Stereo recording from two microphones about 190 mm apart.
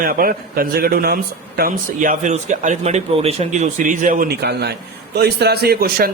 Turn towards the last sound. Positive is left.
turn(degrees=-55)  # may be behind; listen again after turning